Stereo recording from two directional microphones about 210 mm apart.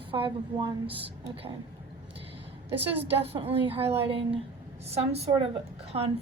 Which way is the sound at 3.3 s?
25° right (ahead or behind).